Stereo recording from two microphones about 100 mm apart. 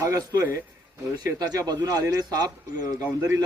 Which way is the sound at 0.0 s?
30° right (ahead or behind).